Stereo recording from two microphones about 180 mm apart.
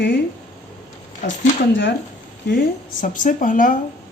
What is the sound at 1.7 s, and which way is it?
Speech, 90° left.